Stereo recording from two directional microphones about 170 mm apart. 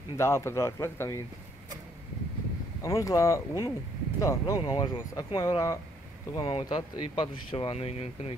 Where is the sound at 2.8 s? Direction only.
20° left (ahead or behind).